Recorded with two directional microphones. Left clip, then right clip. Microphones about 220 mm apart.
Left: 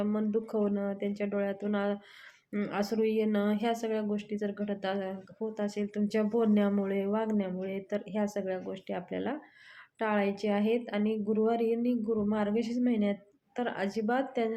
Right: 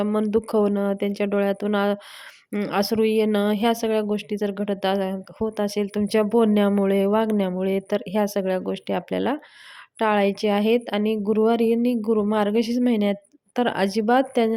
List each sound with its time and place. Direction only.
0.0 s a woman's voice: 45° right (ahead or behind)